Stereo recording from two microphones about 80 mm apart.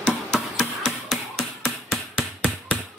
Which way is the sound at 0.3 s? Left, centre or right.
Centre.